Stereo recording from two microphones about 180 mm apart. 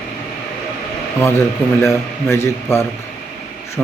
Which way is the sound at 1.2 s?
15° left (ahead or behind).